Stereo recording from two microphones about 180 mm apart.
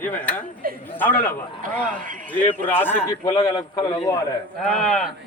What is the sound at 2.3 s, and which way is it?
A man's voice, 10° left (ahead or behind).